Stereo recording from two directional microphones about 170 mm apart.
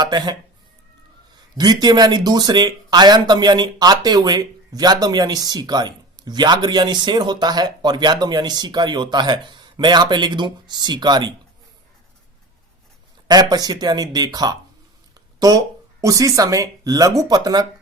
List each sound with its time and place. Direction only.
0.0 s speech: 25° right (ahead or behind)
1.5 s speech: 25° right (ahead or behind)
13.2 s speech: 25° right (ahead or behind)